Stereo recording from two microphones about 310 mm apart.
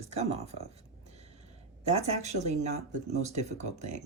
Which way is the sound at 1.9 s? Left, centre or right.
Right.